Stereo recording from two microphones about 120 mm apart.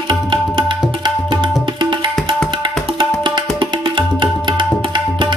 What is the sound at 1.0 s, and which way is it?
Tabla, 40° right (ahead or behind).